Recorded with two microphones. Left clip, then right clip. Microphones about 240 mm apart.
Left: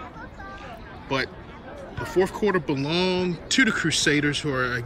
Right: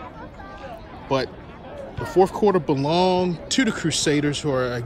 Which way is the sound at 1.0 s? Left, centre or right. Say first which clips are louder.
Right 3 dB; centre.